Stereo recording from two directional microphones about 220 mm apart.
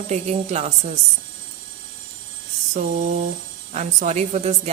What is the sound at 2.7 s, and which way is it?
A woman's voice, 35° right (ahead or behind).